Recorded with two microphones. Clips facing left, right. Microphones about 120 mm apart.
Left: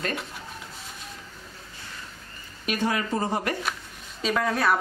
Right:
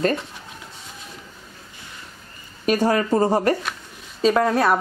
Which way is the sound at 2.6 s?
40° right (ahead or behind).